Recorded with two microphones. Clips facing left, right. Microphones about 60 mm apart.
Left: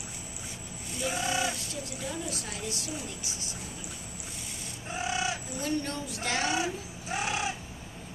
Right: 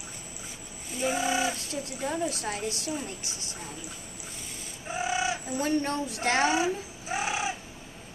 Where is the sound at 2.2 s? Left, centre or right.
Right.